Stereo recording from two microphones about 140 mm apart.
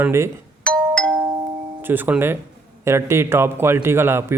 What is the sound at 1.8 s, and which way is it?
A man's voice, 15° right (ahead or behind).